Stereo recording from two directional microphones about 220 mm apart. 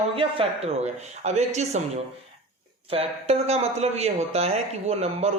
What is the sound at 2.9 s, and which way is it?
A man's voice, 25° right (ahead or behind).